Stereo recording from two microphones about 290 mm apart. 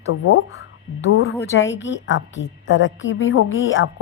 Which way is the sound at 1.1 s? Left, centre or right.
Left.